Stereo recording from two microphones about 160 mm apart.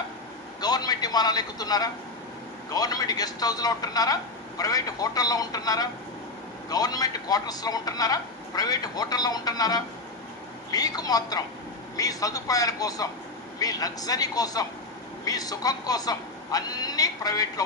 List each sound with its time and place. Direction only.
0.6 s a man's voice: 25° left (ahead or behind)